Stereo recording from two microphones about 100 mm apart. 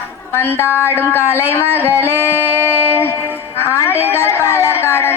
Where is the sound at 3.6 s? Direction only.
25° left (ahead or behind).